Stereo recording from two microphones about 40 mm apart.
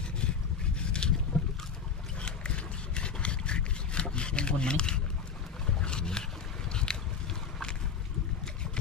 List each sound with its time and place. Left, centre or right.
0.7 s boat: left
2.2 s a sound: left
5.8 s wild animals: left
6.7 s boat: left